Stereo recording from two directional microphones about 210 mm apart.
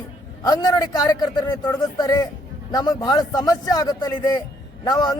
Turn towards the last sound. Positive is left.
turn(degrees=20)  # may be behind; listen again after turning